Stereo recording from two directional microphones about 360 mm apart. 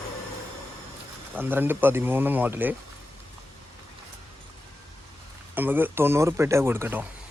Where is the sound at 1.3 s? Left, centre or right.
Centre.